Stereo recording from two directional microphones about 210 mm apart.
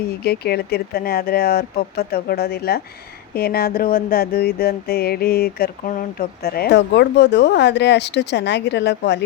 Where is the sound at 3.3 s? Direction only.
45° left (ahead or behind).